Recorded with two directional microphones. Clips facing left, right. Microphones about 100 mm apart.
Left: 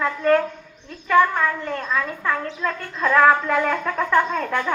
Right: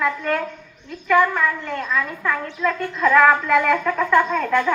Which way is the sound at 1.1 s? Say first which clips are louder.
Even; 35° left (ahead or behind).